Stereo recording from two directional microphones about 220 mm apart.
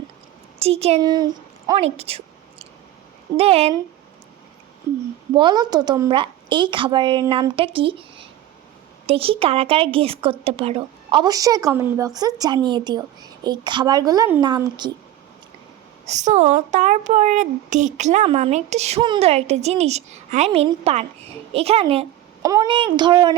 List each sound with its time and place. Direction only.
0.6 s speech: 25° right (ahead or behind)
1.0 s speech: 15° right (ahead or behind)
1.6 s a sound: 25° right (ahead or behind)
3.3 s speech: 25° right (ahead or behind)
5.3 s speech: 20° right (ahead or behind)
16.0 s a woman's voice: 30° right (ahead or behind)